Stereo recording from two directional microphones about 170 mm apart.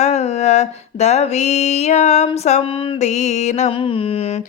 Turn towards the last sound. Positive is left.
turn(degrees=35)  # may be behind; listen again after turning